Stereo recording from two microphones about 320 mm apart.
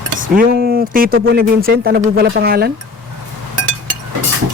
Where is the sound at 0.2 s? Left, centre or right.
Right.